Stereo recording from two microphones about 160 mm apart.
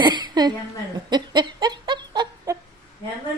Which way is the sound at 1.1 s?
25° right (ahead or behind).